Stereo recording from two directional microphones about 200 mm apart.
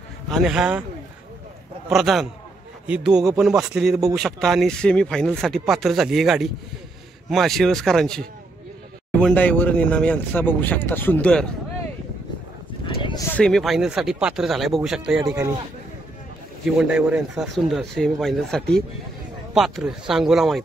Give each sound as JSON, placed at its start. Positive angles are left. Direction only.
{"t": 0.3, "sound": "speech", "side_deg": 0}
{"t": 1.9, "sound": "speech", "side_deg": 0}
{"t": 12.8, "sound": "a sound", "side_deg": 25}
{"t": 13.4, "sound": "speech", "side_deg": 0}
{"t": 15.2, "sound": "speech", "side_deg": -15}
{"t": 16.7, "sound": "speech", "side_deg": -5}